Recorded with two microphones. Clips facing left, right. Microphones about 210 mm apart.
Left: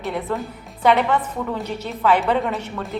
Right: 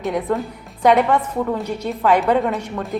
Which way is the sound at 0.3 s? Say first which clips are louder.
Right 4 dB; 15° right (ahead or behind).